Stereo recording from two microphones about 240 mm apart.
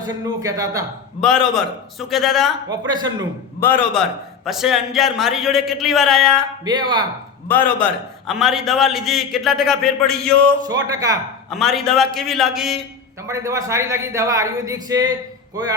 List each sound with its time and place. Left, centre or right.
0.0 s speech: centre
1.2 s a man's voice: centre
2.6 s speech: centre
3.6 s a man's voice: centre
6.7 s speech: centre
7.4 s a man's voice: centre
10.7 s speech: centre
11.5 s a man's voice: centre
13.2 s speech: centre